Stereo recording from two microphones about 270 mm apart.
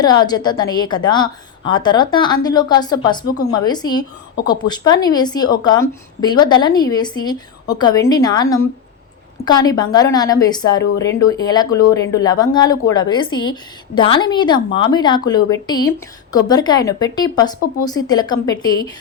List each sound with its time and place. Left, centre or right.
0.0 s a woman's voice: centre